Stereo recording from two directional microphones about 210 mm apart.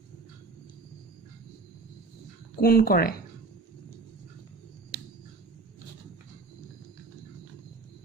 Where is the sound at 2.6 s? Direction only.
45° left (ahead or behind).